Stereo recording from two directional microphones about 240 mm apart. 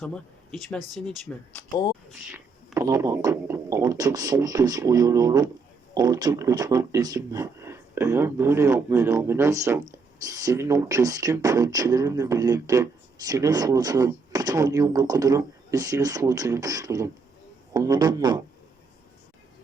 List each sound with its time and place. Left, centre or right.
0.0 s speech: centre
2.7 s speech: centre